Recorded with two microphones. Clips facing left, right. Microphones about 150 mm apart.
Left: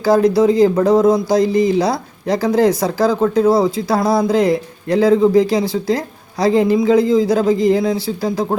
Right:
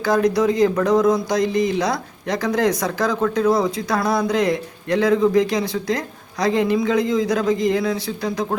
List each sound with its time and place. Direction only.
0.0 s speech: 30° left (ahead or behind)